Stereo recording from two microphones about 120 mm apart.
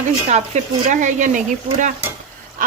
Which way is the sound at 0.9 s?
90° right.